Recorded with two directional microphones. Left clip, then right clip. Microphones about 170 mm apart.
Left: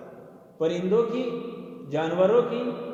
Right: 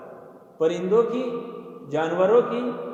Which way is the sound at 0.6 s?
50° right (ahead or behind).